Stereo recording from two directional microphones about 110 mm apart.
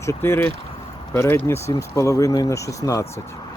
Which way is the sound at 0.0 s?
25° left (ahead or behind).